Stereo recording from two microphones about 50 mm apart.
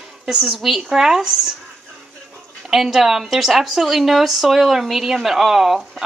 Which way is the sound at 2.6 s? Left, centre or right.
Centre.